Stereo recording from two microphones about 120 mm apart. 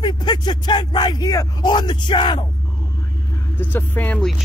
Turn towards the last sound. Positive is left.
turn(degrees=15)  # may be behind; listen again after turning